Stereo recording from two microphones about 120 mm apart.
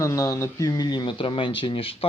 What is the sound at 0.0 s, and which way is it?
Speech, 25° left (ahead or behind).